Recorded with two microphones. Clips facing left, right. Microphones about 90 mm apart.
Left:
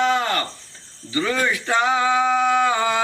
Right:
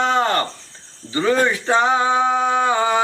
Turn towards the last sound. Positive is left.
turn(degrees=-25)  # may be behind; listen again after turning